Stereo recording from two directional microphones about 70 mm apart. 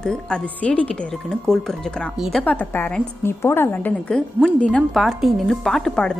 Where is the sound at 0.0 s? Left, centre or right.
Centre.